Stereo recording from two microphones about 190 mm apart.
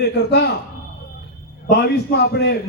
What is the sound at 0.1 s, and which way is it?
Speech, 60° left (ahead or behind).